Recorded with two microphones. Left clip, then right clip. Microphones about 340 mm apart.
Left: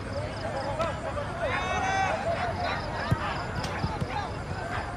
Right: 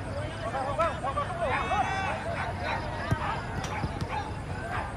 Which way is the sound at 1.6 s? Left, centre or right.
Centre.